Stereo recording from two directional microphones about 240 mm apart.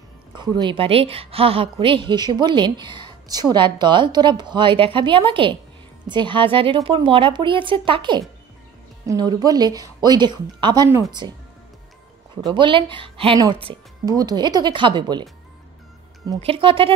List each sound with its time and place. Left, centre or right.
0.3 s a woman's voice: centre
12.5 s a woman's voice: right
16.3 s a woman's voice: right